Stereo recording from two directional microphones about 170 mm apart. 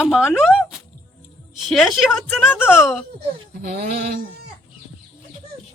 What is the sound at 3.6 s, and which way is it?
Bleat, 65° right (ahead or behind).